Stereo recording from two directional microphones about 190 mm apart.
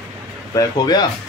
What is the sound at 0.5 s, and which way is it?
Speech, 20° left (ahead or behind).